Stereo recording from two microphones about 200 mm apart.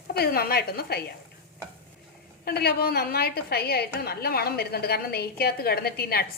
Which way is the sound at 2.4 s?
50° left (ahead or behind).